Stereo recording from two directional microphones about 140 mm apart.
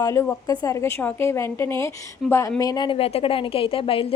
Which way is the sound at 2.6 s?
30° left (ahead or behind).